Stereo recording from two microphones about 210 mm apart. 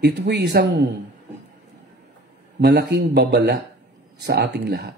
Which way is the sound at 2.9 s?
55° right (ahead or behind).